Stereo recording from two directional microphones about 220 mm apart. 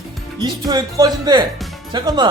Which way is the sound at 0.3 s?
20° right (ahead or behind).